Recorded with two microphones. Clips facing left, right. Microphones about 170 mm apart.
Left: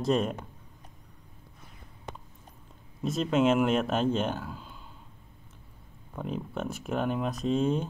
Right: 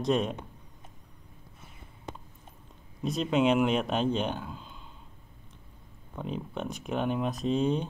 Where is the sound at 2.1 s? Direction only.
65° left (ahead or behind).